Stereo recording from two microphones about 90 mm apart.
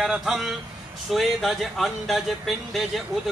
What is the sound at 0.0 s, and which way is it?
Speech, 5° right (ahead or behind).